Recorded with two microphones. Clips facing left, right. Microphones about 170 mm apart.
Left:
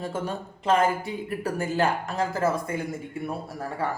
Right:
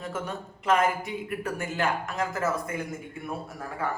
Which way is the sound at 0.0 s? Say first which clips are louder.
Left 3 dB; 30° left (ahead or behind).